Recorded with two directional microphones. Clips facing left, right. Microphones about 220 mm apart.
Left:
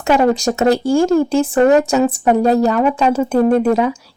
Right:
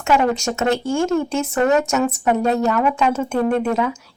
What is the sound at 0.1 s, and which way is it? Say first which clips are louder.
Speech: left 4 dB; 35° left (ahead or behind).